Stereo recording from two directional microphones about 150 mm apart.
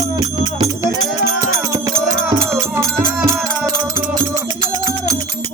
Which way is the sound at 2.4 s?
20° right (ahead or behind).